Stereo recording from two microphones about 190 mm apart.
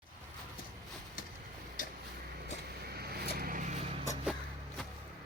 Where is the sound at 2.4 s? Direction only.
55° right (ahead or behind).